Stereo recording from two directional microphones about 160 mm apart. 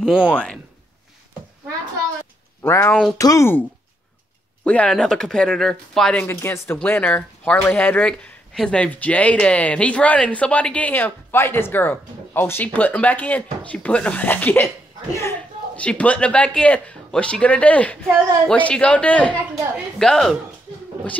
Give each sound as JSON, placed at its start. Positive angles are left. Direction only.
{"t": 0.0, "sound": "speech", "side_deg": -5}
{"t": 0.3, "sound": "speech", "side_deg": 5}
{"t": 2.6, "sound": "speech", "side_deg": 15}
{"t": 4.6, "sound": "speech", "side_deg": 5}
{"t": 6.2, "sound": "speech", "side_deg": 15}